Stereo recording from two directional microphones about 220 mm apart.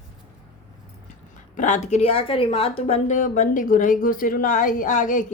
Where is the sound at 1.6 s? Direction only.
30° left (ahead or behind).